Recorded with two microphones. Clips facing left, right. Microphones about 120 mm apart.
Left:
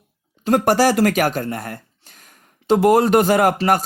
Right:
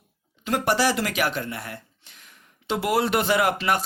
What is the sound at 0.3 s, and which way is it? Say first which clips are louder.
Speech: left 7 dB; 45° left (ahead or behind).